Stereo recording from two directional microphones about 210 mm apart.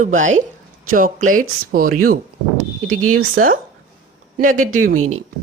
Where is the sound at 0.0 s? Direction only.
35° right (ahead or behind).